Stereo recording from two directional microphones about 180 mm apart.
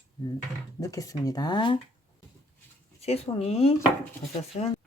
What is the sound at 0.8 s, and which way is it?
Speech, 20° left (ahead or behind).